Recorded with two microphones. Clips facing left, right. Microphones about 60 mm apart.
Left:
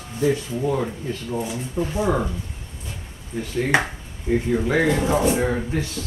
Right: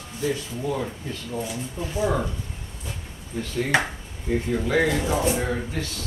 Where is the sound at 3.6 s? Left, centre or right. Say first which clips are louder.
Left 2 dB; left.